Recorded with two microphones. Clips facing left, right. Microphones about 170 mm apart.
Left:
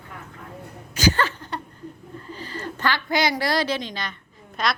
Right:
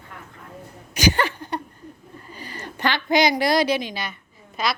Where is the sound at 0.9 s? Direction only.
15° right (ahead or behind).